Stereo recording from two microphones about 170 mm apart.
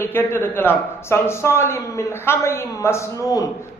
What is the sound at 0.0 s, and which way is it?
A woman's voice, 15° left (ahead or behind).